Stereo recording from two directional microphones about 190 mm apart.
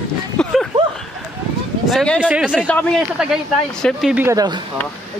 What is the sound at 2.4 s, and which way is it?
Speech, 5° left (ahead or behind).